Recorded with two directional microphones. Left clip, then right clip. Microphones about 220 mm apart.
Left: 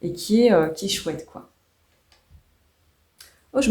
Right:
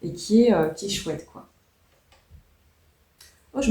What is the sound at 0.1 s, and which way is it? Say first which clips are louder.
Speech: left 2 dB; 40° left (ahead or behind).